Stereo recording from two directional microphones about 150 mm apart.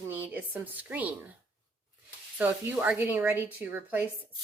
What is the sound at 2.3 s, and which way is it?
Speech, 15° right (ahead or behind).